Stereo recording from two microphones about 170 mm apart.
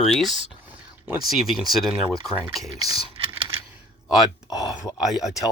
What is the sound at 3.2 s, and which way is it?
Computer keyboard, 30° right (ahead or behind).